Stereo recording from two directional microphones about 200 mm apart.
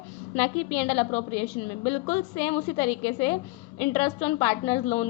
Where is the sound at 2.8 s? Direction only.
10° left (ahead or behind).